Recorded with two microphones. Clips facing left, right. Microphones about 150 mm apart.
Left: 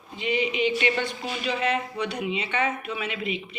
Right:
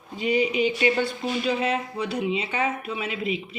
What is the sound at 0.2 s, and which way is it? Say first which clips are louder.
Speech: right 3 dB; 40° right (ahead or behind).